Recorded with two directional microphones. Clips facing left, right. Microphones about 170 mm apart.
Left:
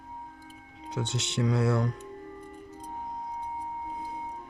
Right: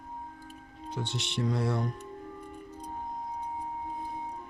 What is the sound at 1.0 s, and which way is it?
Speech, 90° left.